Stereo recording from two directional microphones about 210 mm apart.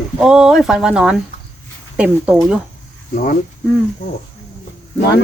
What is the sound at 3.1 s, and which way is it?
Speech, 40° left (ahead or behind).